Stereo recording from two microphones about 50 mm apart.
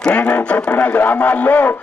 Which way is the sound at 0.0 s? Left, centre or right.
Left.